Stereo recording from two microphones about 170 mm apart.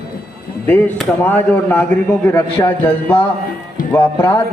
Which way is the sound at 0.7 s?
10° left (ahead or behind).